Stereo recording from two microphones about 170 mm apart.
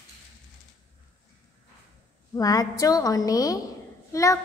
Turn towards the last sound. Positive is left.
turn(degrees=20)  # may be behind; listen again after turning